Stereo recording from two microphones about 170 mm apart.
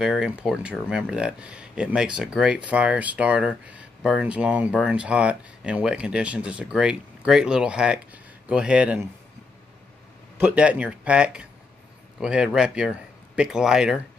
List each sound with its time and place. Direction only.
0.0 s speech: 5° right (ahead or behind)
10.4 s speech: 10° right (ahead or behind)